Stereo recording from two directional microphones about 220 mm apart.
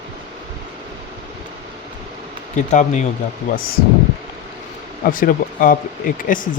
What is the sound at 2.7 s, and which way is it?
Speech, 35° left (ahead or behind).